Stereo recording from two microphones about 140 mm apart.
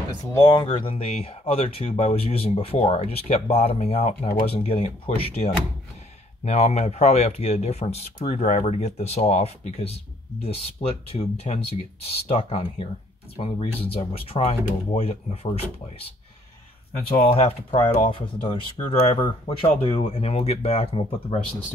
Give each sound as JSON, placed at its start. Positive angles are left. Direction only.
{"t": 0.3, "sound": "speech", "side_deg": 25}
{"t": 0.7, "sound": "speech", "side_deg": 40}
{"t": 17.1, "sound": "speech", "side_deg": 40}